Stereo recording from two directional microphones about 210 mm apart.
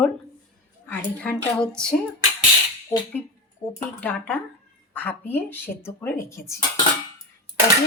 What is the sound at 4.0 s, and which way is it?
A woman's voice, 5° left (ahead or behind).